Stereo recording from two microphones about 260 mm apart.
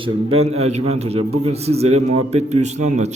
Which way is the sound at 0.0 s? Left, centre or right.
Right.